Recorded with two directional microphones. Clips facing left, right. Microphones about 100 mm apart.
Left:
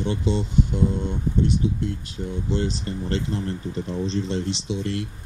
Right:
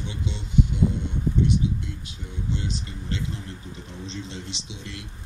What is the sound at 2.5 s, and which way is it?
Speech, 40° left (ahead or behind).